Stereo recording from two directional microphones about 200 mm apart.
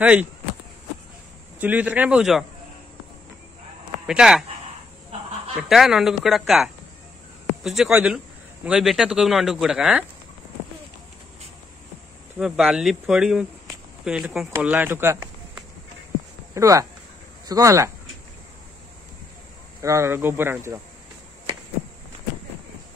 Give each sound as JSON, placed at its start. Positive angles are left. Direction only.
{"t": 0.0, "sound": "speech", "side_deg": -5}
{"t": 1.6, "sound": "speech", "side_deg": -5}
{"t": 4.1, "sound": "speech", "side_deg": -5}
{"t": 5.6, "sound": "speech", "side_deg": 0}
{"t": 12.4, "sound": "speech", "side_deg": 0}
{"t": 19.8, "sound": "speech", "side_deg": -15}